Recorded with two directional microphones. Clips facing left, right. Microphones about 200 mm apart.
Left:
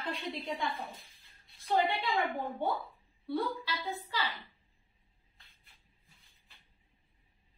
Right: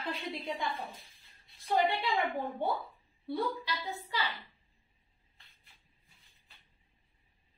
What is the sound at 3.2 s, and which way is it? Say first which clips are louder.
Speech: even; 15° right (ahead or behind).